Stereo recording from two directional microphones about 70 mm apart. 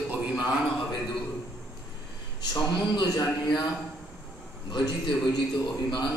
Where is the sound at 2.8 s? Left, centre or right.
Left.